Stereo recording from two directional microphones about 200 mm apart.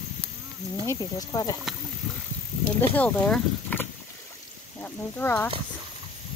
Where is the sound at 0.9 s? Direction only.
15° left (ahead or behind).